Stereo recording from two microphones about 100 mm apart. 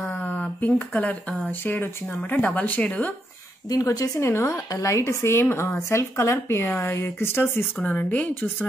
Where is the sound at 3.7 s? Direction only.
35° left (ahead or behind).